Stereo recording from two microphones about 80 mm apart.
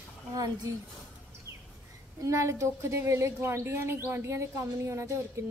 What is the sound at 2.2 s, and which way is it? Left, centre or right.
A woman's voice, right.